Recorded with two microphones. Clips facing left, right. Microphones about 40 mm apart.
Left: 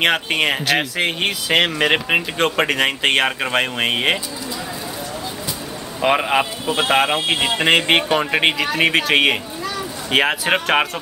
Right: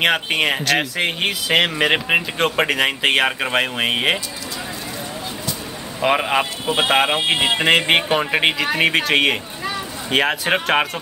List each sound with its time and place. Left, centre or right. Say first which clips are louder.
0.0 s speech: even; centre
5.9 s speech: left 1 dB; centre
6.6 s speech: even; centre
7.6 s speech: left 2 dB; centre